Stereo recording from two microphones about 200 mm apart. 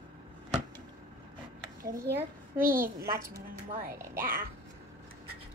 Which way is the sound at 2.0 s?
50° right (ahead or behind).